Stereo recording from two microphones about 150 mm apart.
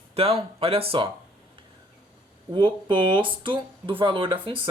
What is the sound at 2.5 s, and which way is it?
Speech, 35° right (ahead or behind).